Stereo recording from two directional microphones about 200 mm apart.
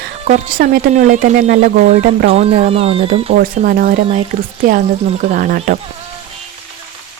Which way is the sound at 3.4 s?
45° right (ahead or behind).